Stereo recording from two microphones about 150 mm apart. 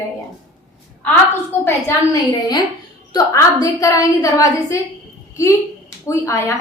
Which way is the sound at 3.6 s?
20° left (ahead or behind).